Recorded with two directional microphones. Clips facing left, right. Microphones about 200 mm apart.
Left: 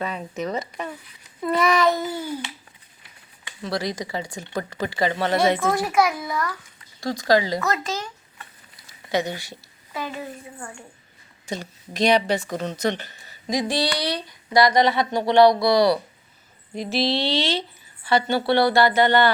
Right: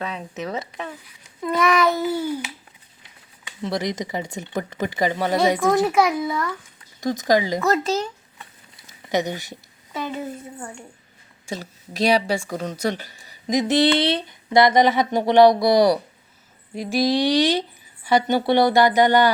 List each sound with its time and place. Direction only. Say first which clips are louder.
0.0 s a child's voice: left 1 dB; centre (ahead or behind)
3.6 s speech: right 2 dB; 20° right (ahead or behind)
7.6 s speech: right 5 dB; 30° right (ahead or behind)
8.7 s a sound: right 1 dB; 20° right (ahead or behind)
11.4 s speech: even; 5° right (ahead or behind)